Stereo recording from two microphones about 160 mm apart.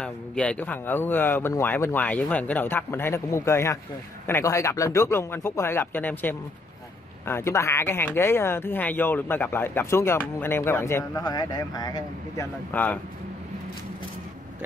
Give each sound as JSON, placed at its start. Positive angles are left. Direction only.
{"t": 0.0, "sound": "speech", "side_deg": 5}
{"t": 12.7, "sound": "speech", "side_deg": 10}